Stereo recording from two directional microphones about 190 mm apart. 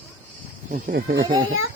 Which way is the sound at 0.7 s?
50° right (ahead or behind).